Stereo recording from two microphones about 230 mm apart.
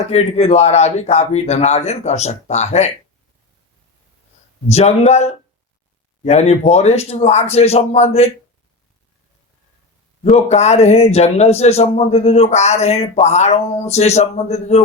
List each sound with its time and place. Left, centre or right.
0.0 s a man's voice: left
4.7 s a man's voice: left
10.2 s a man's voice: left